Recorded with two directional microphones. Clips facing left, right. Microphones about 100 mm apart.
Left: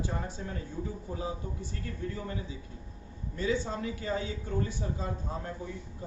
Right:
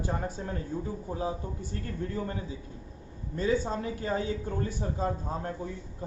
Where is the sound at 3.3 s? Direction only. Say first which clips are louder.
Right 3 dB; 40° right (ahead or behind).